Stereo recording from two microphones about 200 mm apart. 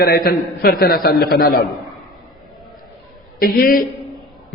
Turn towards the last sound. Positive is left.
turn(degrees=45)  # may be behind; listen again after turning